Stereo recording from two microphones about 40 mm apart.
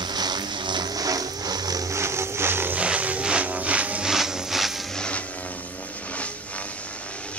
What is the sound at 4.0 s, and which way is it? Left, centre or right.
Wood, centre.